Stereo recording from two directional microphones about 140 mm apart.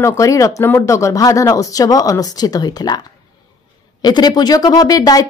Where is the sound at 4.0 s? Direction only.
30° left (ahead or behind).